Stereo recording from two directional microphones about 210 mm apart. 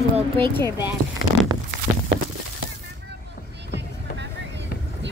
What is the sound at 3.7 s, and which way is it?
Music, 55° right (ahead or behind).